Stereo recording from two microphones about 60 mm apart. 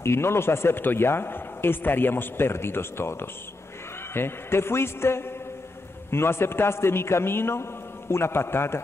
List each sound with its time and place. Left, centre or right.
0.0 s a man's voice: left